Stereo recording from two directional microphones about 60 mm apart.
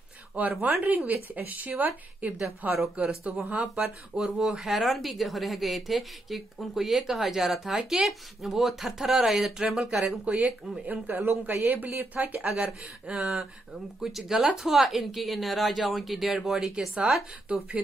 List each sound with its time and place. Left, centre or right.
0.4 s speech: right
4.2 s speech: centre
10.2 s speech: right
12.6 s speech: centre